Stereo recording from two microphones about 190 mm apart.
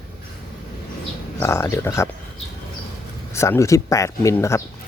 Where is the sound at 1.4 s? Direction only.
15° left (ahead or behind).